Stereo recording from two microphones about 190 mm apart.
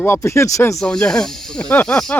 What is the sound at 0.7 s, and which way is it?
Speech, 5° left (ahead or behind).